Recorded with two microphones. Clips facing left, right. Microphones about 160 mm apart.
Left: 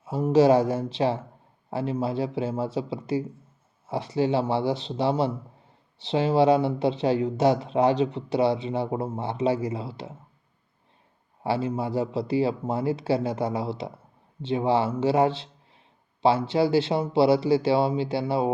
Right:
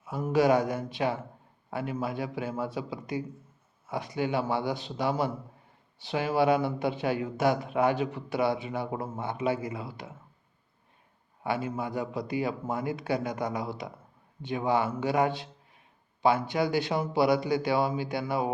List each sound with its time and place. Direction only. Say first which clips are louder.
0.0 s speech: left 6 dB; 30° left (ahead or behind)
11.4 s speech: left 5 dB; 30° left (ahead or behind)